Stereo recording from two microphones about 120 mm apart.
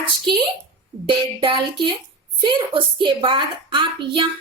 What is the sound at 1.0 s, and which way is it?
A woman's voice, 45° right (ahead or behind).